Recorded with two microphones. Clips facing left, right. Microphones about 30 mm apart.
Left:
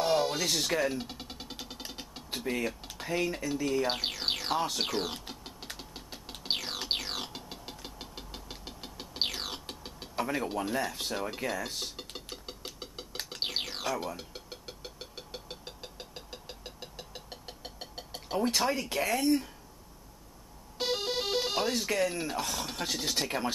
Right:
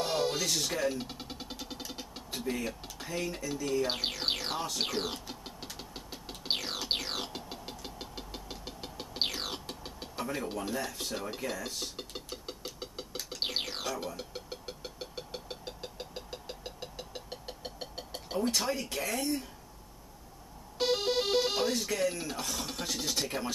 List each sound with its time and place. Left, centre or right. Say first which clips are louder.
0.0 s speech: left 3 dB; centre; by 3.3 s left
3.8 s speech: left 1 dB; centre
5.3 s a sound: right 1 dB; centre
5.8 s knock: right 1 dB; centre
10.3 s speech: left 3 dB; centre
10.9 s speech: left 3 dB; centre
11.1 s speech: left 3 dB; centre
12.1 s knock: right 1 dB; centre
13.1 s a sound: left 4 dB; left
13.4 s a sound: even; centre
18.6 s speech: left 4 dB; centre
20.7 s music: right 3 dB; centre
21.9 s speech: left 2 dB; centre